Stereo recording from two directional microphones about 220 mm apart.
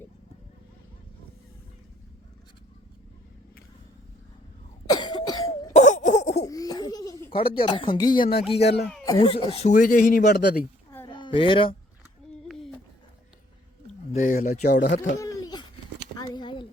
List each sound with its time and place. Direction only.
4.9 s cough: 20° left (ahead or behind)
5.7 s cough: 35° left (ahead or behind)
6.4 s laughter: 15° left (ahead or behind)
7.3 s speech: 25° left (ahead or behind); by 10.6 s 40° left (ahead or behind)
10.9 s a sound: 20° left (ahead or behind)
14.1 s speech: 35° left (ahead or behind)
15.2 s a sound: 15° left (ahead or behind)